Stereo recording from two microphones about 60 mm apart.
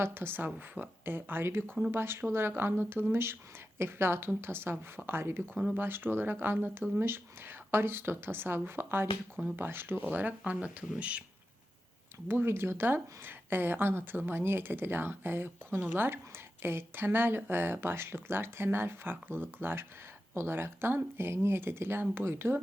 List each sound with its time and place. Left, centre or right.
0.0 s speech: right
12.3 s speech: right